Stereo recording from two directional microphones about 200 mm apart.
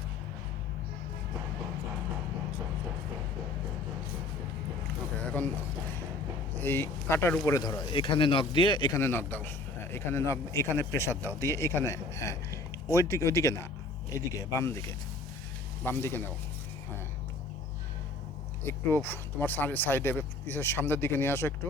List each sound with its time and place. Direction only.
6.6 s speech: 10° left (ahead or behind)
18.6 s speech: 10° left (ahead or behind)